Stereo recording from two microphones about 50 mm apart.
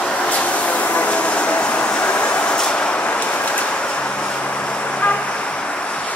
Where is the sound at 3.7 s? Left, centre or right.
Centre.